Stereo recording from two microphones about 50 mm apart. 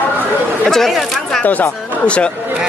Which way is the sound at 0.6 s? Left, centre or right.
Centre.